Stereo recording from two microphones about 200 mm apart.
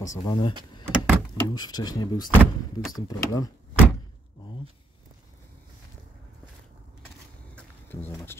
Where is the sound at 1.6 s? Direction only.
20° left (ahead or behind).